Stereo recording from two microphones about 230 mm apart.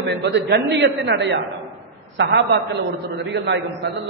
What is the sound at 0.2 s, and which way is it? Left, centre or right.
A man's voice, right.